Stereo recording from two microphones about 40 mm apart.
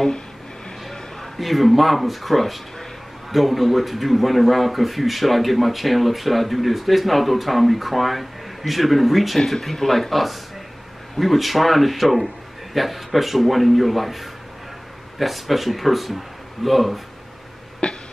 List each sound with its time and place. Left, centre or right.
0.8 s speech: centre
17.8 s throat clearing: left